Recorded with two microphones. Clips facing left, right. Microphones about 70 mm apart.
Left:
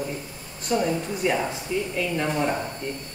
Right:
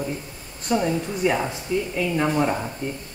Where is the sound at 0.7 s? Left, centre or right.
Centre.